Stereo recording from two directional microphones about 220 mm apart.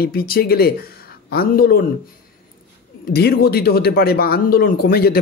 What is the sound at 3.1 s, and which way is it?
Speech, 45° left (ahead or behind).